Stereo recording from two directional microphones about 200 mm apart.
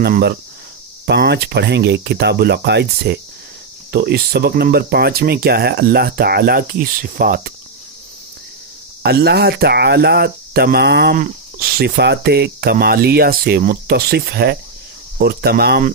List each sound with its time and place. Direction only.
0.0 s speech: 55° right (ahead or behind)
9.0 s speech: 55° right (ahead or behind)